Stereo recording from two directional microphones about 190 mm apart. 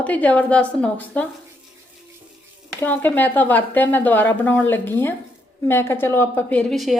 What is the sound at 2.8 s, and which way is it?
A woman's voice, 10° left (ahead or behind).